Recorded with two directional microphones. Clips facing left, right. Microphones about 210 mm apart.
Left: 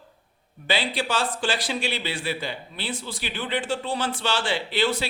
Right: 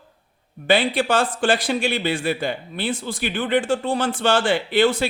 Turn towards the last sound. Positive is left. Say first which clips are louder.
# right 6 dB
turn(degrees=-50)  # may be behind; listen again after turning